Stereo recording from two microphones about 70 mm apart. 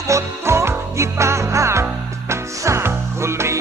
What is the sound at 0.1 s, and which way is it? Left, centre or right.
Music, right.